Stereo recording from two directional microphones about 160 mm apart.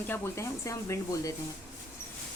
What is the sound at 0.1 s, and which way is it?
Speech, 20° left (ahead or behind).